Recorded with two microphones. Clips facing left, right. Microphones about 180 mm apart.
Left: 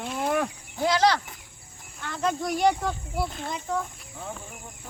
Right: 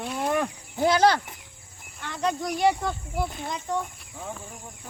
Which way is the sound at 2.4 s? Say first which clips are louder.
Even; centre (ahead or behind).